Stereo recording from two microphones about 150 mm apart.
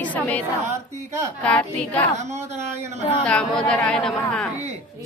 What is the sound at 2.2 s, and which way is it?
Speech, 50° right (ahead or behind).